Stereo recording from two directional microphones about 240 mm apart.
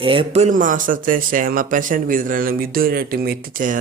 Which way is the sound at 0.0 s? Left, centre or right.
Right.